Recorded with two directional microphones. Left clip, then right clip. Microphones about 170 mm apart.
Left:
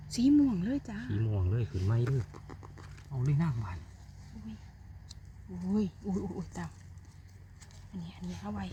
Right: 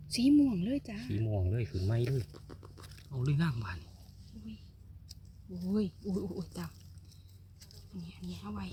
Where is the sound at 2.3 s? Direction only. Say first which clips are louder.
Left 3 dB; 35° left (ahead or behind).